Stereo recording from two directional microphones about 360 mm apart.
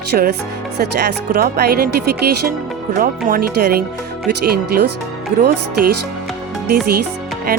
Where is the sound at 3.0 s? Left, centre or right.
Right.